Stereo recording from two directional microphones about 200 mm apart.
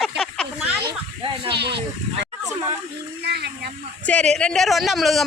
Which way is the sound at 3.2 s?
55° right (ahead or behind).